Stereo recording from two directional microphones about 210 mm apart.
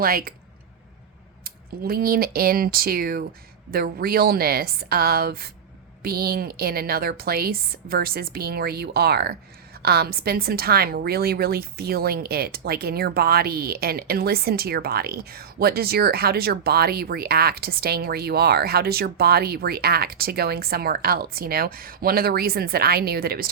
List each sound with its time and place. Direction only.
0.0 s a woman's voice: 45° right (ahead or behind)
1.5 s a woman's voice: 45° right (ahead or behind)